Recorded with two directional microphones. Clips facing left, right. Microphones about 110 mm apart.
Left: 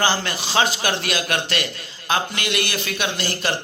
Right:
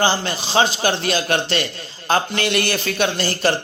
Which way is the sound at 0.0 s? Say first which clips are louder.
Right 2 dB; 25° right (ahead or behind).